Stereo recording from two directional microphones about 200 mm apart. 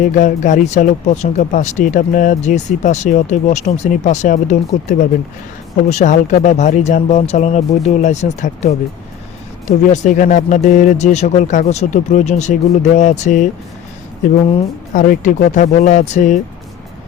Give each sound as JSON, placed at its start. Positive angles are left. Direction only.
{"t": 0.0, "sound": "a woman's voice", "side_deg": 40}
{"t": 15.0, "sound": "speech", "side_deg": 40}